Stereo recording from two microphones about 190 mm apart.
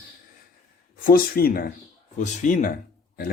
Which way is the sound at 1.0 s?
50° left (ahead or behind).